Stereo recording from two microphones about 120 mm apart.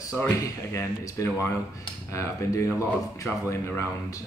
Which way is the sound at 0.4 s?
25° left (ahead or behind).